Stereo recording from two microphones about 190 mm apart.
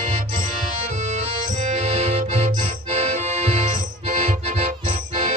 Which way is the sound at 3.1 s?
40° right (ahead or behind).